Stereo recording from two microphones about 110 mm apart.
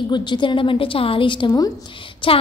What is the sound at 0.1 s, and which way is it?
A woman's voice, 45° left (ahead or behind).